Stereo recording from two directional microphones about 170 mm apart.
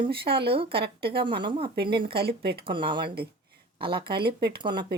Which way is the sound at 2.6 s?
30° right (ahead or behind).